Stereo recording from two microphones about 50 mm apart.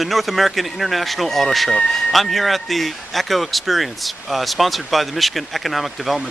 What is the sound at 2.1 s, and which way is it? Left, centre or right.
Speech, centre.